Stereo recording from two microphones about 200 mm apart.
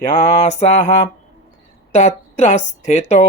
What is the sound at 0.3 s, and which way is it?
Speech, 35° left (ahead or behind).